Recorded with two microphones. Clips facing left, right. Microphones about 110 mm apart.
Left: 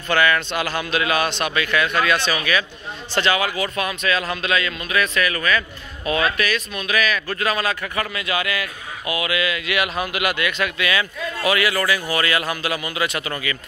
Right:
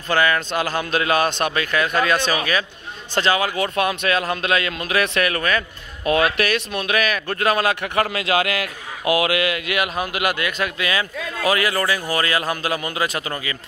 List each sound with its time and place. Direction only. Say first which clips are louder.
0.1 s a man's voice: even; 35° right (ahead or behind); by 7.7 s 55° right (ahead or behind)
7.9 s a man's voice: right 5 dB; 70° right (ahead or behind)
9.7 s a man's voice: even; 40° right (ahead or behind)